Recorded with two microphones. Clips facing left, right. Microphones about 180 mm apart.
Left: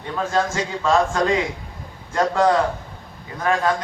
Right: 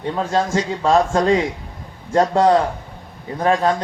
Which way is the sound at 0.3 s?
30° right (ahead or behind).